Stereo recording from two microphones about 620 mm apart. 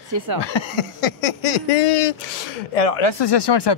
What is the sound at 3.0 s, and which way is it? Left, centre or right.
Speech, left.